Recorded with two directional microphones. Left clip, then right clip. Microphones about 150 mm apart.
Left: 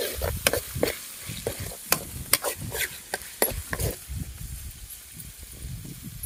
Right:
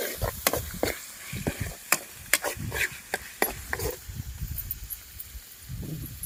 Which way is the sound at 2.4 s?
60° left (ahead or behind).